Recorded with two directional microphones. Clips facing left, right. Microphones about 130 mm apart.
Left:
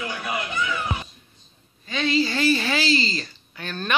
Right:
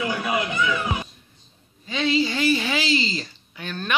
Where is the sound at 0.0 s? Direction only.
20° right (ahead or behind).